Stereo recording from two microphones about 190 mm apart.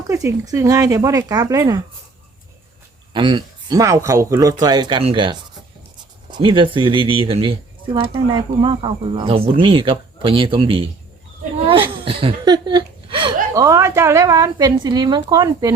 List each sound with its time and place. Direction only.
0.1 s speech: 15° right (ahead or behind)
3.1 s speech: 25° right (ahead or behind)